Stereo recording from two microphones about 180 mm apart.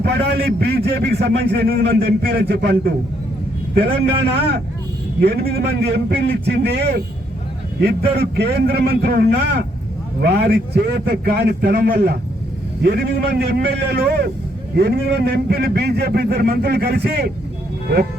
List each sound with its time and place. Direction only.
0.0 s a man's voice: 65° right (ahead or behind)
5.2 s a man's voice: 60° right (ahead or behind)